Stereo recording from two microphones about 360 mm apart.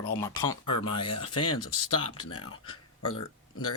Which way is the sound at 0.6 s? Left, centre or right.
Left.